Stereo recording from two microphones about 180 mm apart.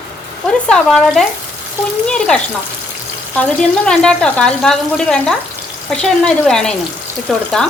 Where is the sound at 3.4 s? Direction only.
5° left (ahead or behind).